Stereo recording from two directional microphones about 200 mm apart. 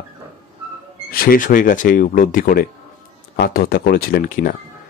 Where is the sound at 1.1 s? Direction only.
45° left (ahead or behind).